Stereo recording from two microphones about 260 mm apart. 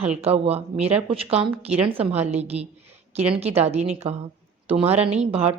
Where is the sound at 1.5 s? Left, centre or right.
Centre.